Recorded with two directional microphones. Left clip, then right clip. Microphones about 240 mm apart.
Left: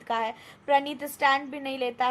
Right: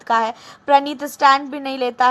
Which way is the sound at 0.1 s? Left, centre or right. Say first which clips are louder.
Right 10 dB; centre.